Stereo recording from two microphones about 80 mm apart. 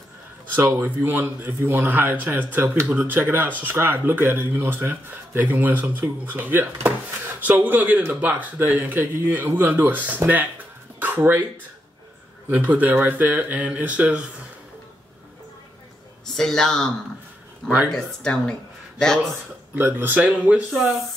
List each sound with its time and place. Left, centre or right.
0.6 s a man's voice: right
11.0 s a sound: right
12.4 s a man's voice: right
16.3 s speech: centre
17.9 s speech: centre
19.7 s a man's voice: right
20.7 s speech: centre